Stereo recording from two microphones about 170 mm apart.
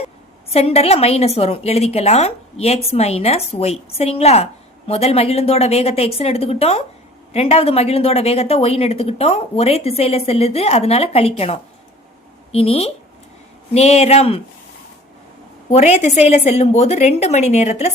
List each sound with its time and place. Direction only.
0.5 s a woman's voice: 35° left (ahead or behind)
15.7 s a woman's voice: 40° left (ahead or behind)